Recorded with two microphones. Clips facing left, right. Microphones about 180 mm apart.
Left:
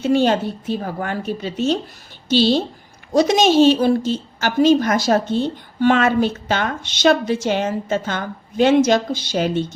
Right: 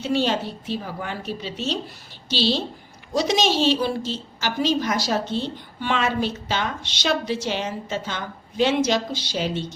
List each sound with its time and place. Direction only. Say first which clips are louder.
0.0 s a woman's voice: left 6 dB; 50° left (ahead or behind)